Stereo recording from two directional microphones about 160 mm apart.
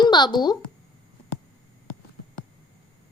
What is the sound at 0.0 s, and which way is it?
Speech, 25° left (ahead or behind).